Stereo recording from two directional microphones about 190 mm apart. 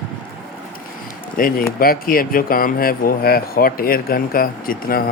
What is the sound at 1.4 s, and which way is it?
Speech, 45° left (ahead or behind).